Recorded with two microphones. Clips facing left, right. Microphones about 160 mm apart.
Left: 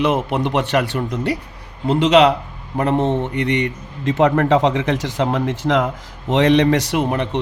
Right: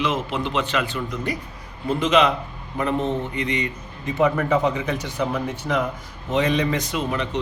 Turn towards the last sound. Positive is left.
turn(degrees=60)  # may be behind; listen again after turning